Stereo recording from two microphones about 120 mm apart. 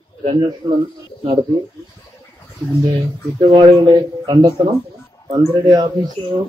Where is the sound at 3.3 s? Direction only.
40° right (ahead or behind).